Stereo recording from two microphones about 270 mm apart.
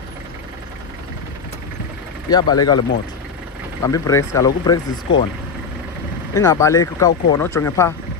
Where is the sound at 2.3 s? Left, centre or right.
Centre.